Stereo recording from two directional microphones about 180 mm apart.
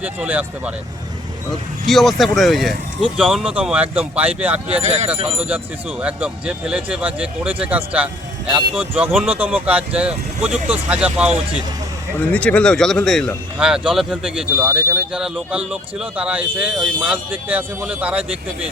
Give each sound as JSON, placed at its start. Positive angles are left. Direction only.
{"t": 0.0, "sound": "speech", "side_deg": -10}
{"t": 1.9, "sound": "speech", "side_deg": 0}
{"t": 4.7, "sound": "speech", "side_deg": -35}
{"t": 6.0, "sound": "speech", "side_deg": -5}
{"t": 12.3, "sound": "speech", "side_deg": 5}